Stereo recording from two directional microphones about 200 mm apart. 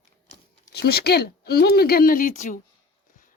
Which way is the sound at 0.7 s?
50° left (ahead or behind).